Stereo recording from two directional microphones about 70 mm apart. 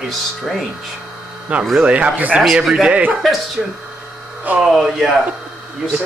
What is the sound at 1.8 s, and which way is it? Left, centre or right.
Speech, centre.